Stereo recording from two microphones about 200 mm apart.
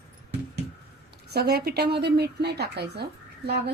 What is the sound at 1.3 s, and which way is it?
Speech, 55° right (ahead or behind).